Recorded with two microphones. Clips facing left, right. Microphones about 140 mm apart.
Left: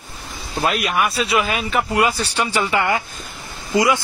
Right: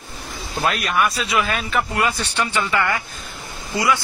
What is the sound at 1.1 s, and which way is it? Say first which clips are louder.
Speech: left 2 dB; 30° left (ahead or behind).